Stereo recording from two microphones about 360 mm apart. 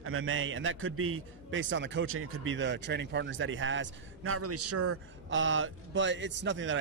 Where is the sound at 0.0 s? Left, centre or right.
Right.